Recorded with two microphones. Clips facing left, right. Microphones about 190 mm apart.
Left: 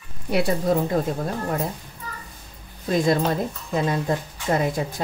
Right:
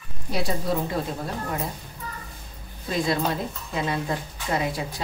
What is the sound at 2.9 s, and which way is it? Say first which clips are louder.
A woman's voice: left 4 dB; 45° left (ahead or behind).